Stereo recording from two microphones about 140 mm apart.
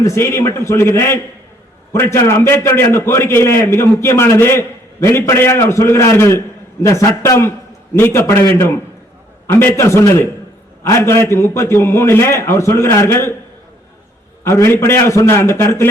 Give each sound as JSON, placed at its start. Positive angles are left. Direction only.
{"t": 0.0, "sound": "a man's voice", "side_deg": 20}
{"t": 14.4, "sound": "a man's voice", "side_deg": 20}